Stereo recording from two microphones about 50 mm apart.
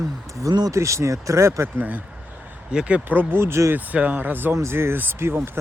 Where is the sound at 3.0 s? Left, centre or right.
Right.